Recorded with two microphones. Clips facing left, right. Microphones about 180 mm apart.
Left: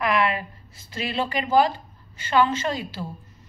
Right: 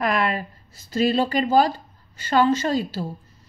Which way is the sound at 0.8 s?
40° right (ahead or behind).